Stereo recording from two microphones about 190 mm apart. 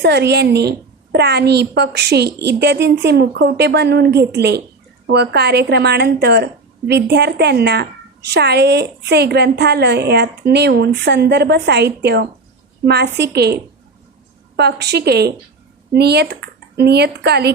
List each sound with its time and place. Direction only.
0.0 s a woman's voice: 60° right (ahead or behind)